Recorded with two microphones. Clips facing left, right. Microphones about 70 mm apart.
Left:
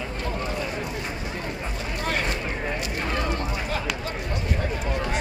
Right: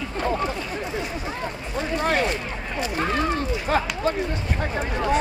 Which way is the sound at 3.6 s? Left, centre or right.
Right.